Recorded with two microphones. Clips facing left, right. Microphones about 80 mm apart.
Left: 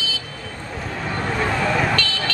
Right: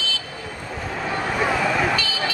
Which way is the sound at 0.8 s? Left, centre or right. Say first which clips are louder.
Right 1 dB; centre.